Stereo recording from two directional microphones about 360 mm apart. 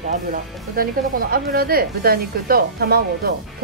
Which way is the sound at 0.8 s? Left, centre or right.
Right.